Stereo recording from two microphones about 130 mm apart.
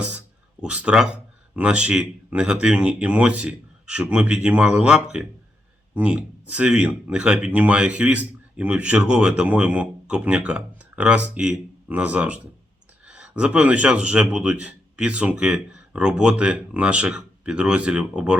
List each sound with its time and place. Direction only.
0.6 s speech: 10° right (ahead or behind)